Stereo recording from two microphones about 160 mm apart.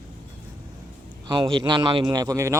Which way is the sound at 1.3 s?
30° right (ahead or behind).